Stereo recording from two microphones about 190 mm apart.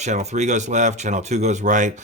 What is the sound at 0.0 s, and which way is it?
Speech, 35° right (ahead or behind).